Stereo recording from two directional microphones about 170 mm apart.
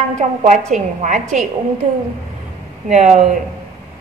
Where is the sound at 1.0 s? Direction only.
45° right (ahead or behind).